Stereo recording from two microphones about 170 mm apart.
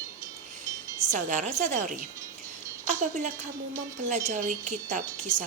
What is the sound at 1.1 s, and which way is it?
A woman's voice, 45° right (ahead or behind).